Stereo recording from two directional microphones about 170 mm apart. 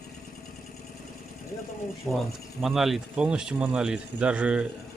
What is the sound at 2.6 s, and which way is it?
A man's voice, centre (ahead or behind).